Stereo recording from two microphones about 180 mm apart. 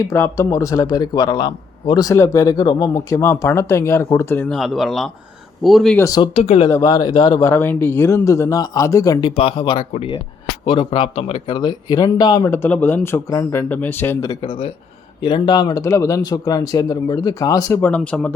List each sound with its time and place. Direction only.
0.1 s a man's voice: 15° left (ahead or behind)
6.0 s speech: 20° left (ahead or behind)
6.3 s speech: 35° left (ahead or behind)
6.7 s a man's voice: 20° left (ahead or behind)
9.3 s speech: 30° left (ahead or behind)
12.6 s a man's voice: 10° left (ahead or behind)